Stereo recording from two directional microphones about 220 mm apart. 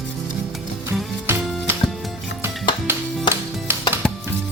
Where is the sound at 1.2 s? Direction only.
10° right (ahead or behind).